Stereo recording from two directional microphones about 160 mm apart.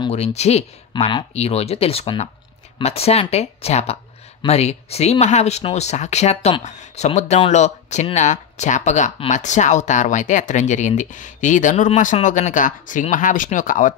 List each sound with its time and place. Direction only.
0.1 s speech: 40° left (ahead or behind)